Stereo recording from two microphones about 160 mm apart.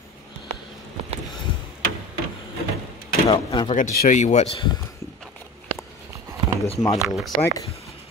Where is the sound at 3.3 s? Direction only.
30° left (ahead or behind).